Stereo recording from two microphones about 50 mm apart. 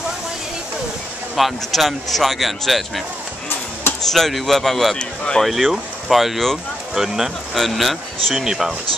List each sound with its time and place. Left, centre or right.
1.3 s speech: centre
4.0 s speech: centre
4.9 s speech: centre
5.4 s speech: centre